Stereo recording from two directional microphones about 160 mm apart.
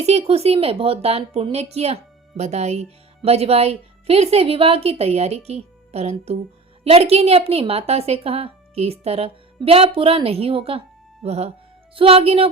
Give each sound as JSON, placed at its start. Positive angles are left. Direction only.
{"t": 0.0, "sound": "a woman's voice", "side_deg": -40}